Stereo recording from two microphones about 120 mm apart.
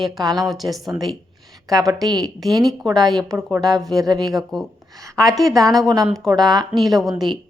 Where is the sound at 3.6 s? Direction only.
Centre (ahead or behind).